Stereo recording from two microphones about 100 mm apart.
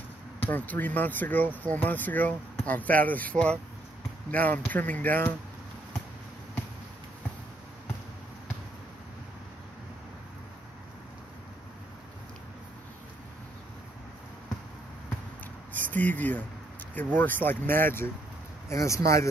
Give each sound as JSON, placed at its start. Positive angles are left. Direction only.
{"t": 0.5, "sound": "speech", "side_deg": 15}
{"t": 15.9, "sound": "speech", "side_deg": 15}